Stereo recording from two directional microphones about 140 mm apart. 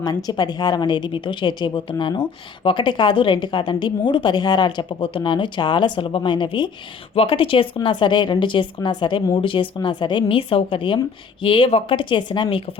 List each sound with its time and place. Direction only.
0.0 s a woman's voice: 30° left (ahead or behind)